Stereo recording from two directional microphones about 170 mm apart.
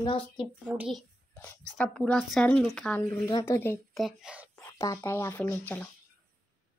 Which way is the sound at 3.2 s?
15° left (ahead or behind).